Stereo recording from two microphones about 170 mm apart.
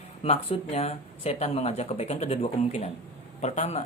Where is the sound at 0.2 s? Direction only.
35° left (ahead or behind).